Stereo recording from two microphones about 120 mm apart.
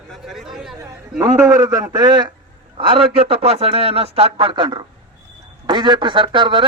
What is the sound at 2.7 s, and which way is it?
Speech, 50° right (ahead or behind).